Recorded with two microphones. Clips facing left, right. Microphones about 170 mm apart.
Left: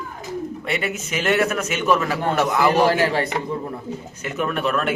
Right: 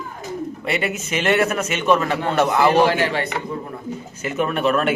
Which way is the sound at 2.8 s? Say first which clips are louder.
Even; 40° left (ahead or behind).